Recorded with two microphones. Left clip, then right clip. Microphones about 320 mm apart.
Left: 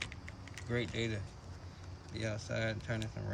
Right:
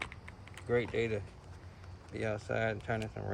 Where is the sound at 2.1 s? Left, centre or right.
Right.